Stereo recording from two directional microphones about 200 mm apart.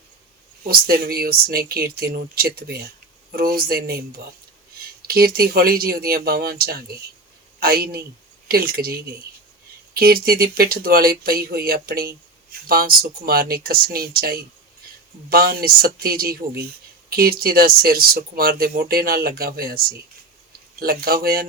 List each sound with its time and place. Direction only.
0.7 s speech: 50° right (ahead or behind)
5.0 s speech: 50° right (ahead or behind)